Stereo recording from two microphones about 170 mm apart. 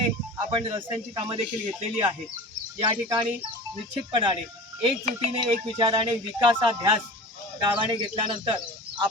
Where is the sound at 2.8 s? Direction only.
25° right (ahead or behind).